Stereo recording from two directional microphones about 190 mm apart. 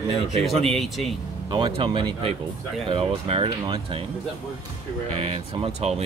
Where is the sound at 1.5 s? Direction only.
25° right (ahead or behind).